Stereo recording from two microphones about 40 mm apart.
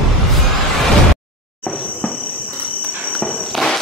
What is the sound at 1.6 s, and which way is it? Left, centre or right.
Insect, left.